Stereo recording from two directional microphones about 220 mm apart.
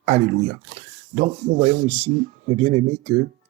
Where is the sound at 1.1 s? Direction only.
35° right (ahead or behind).